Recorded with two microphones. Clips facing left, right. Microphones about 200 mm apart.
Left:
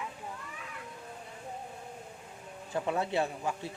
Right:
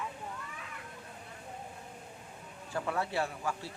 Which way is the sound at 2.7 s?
20° left (ahead or behind).